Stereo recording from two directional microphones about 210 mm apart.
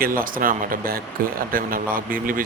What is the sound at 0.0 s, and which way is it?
Speech, 40° right (ahead or behind).